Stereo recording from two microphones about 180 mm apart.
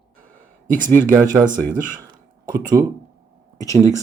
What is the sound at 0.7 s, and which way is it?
Speech, 50° right (ahead or behind).